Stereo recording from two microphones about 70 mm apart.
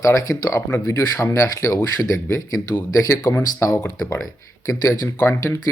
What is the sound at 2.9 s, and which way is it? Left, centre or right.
Speech, left.